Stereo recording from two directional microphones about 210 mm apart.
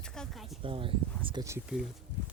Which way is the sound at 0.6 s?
25° right (ahead or behind).